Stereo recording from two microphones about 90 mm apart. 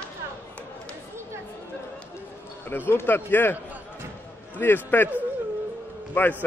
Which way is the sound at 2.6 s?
20° left (ahead or behind).